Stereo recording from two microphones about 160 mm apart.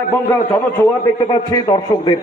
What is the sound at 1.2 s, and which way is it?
Speech, 25° left (ahead or behind).